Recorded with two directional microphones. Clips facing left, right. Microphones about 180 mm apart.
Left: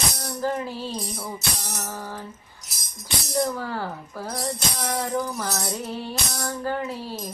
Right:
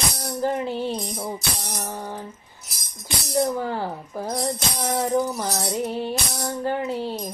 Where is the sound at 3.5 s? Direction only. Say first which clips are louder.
Right 4 dB; 20° right (ahead or behind).